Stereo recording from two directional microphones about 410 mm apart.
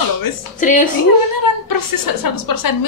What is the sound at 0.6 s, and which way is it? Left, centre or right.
Speech, centre.